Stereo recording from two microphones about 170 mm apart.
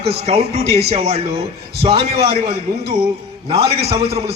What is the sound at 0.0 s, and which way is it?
A man's voice, 35° right (ahead or behind).